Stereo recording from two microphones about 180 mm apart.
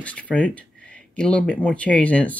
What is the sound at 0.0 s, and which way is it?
Speech, 5° left (ahead or behind).